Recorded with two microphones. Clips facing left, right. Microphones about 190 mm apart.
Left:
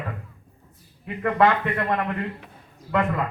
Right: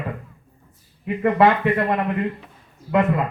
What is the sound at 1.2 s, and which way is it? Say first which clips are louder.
Speech: right 4 dB; 25° right (ahead or behind).